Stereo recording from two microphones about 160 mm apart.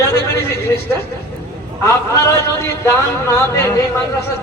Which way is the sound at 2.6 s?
15° left (ahead or behind).